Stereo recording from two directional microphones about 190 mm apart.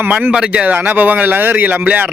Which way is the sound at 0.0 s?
10° right (ahead or behind).